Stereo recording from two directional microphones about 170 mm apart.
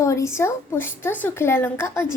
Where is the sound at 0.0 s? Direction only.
15° left (ahead or behind).